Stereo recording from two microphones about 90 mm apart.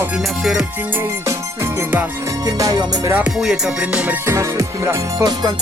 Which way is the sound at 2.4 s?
45° right (ahead or behind).